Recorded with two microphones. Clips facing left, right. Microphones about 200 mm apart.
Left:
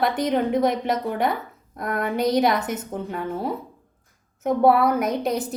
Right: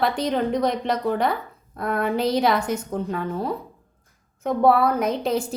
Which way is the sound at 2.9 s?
5° left (ahead or behind).